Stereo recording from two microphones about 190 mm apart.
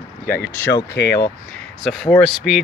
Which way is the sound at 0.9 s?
65° left (ahead or behind).